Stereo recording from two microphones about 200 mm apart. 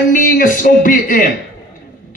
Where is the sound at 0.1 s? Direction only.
40° left (ahead or behind).